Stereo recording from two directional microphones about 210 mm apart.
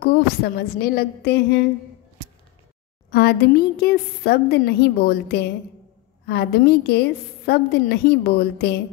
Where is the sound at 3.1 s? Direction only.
50° left (ahead or behind).